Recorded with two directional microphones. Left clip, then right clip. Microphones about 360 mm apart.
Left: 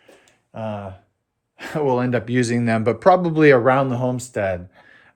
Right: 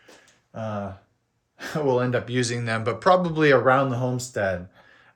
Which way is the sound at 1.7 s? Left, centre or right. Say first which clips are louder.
Left 3 dB; left.